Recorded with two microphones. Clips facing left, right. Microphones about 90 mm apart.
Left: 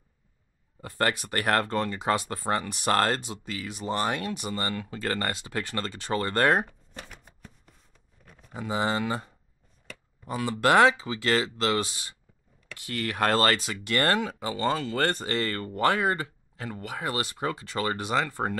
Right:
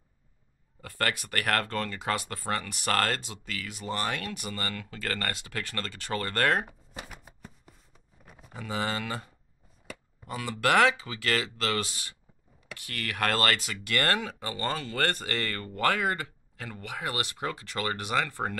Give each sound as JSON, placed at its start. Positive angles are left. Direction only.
{"t": 0.7, "sound": "speech", "side_deg": 25}
{"t": 6.6, "sound": "shuffling cards", "side_deg": -5}
{"t": 8.3, "sound": "a sound", "side_deg": -5}
{"t": 8.5, "sound": "speech", "side_deg": 25}